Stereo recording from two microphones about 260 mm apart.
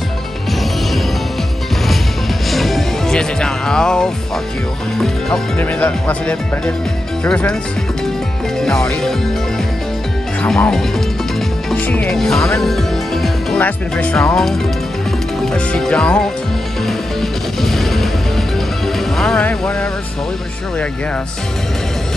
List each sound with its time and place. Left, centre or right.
2.5 s music: centre
4.9 s speech: centre
8.5 s speech: centre
10.4 s speech: centre
16.8 s music: centre